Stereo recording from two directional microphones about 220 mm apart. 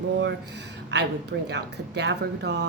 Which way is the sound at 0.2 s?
50° right (ahead or behind).